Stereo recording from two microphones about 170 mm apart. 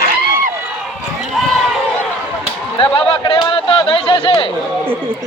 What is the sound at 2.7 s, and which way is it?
Speech, 30° left (ahead or behind).